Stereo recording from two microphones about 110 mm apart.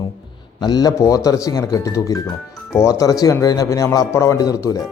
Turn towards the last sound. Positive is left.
turn(degrees=30)  # may be behind; listen again after turning